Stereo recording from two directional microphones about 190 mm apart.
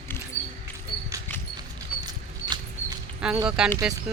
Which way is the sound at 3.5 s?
5° right (ahead or behind).